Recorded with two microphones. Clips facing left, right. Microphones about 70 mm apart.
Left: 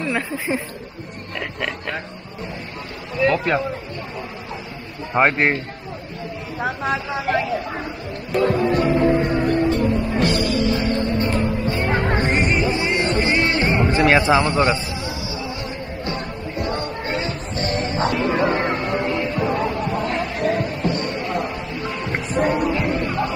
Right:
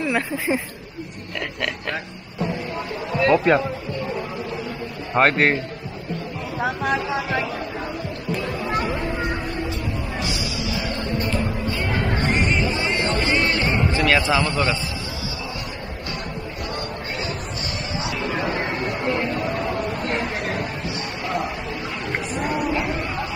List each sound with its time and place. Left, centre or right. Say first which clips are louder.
0.0 s speech: right 1 dB; centre
3.2 s speech: right 2 dB; centre
5.1 s a man's voice: even; centre
6.6 s speech: even; centre
8.3 s speech: left 9 dB; left
8.7 s music: left 7 dB; left
16.6 s music: left 5 dB; left
19.3 s a sound: left 3 dB; left
22.3 s a sound: left 6 dB; left
22.9 s music: left 5 dB; left